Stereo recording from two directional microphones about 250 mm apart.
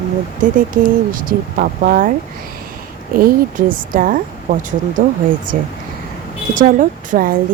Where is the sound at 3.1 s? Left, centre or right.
Right.